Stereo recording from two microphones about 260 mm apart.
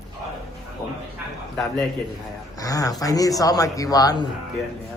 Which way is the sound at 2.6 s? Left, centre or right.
Centre.